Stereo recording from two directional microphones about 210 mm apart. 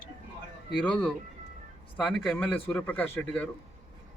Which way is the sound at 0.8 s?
5° left (ahead or behind).